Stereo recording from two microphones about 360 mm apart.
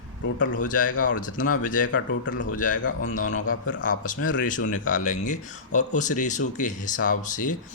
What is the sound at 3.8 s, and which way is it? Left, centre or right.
Speech, left.